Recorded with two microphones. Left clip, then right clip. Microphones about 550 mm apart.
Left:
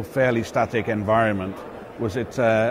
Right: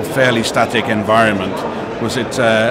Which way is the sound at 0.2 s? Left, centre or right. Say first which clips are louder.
Right 7 dB; left.